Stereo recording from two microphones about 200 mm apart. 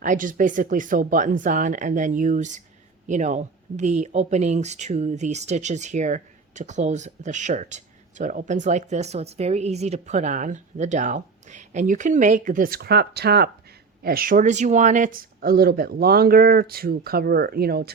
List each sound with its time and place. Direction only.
0.0 s speech: 40° right (ahead or behind)